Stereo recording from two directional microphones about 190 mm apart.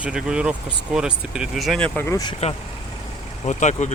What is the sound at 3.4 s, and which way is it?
Speech, 40° left (ahead or behind).